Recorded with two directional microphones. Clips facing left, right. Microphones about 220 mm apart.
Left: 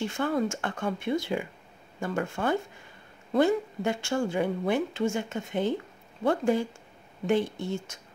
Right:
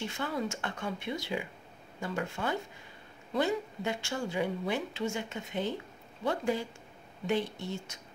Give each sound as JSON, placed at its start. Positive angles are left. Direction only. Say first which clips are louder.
{"t": 0.1, "sound": "speech", "louder": "left 7 dB", "side_deg": 50}